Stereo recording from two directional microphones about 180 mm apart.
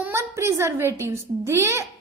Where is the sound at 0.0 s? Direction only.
15° right (ahead or behind).